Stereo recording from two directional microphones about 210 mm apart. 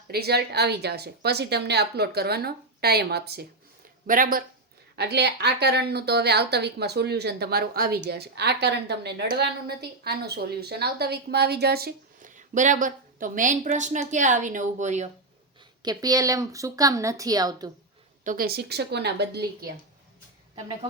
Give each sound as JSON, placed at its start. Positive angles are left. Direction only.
{"t": 0.1, "sound": "a woman's voice", "side_deg": -50}
{"t": 15.8, "sound": "a woman's voice", "side_deg": -20}
{"t": 18.2, "sound": "speech", "side_deg": -40}